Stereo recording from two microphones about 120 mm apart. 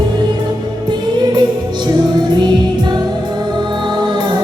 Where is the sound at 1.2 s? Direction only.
40° right (ahead or behind).